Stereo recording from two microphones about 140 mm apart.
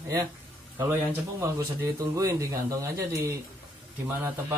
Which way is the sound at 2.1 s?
25° right (ahead or behind).